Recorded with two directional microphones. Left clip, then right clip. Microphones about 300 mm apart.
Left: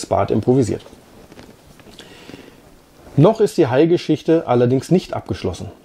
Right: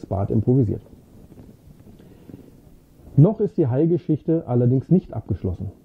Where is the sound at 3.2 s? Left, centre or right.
Centre.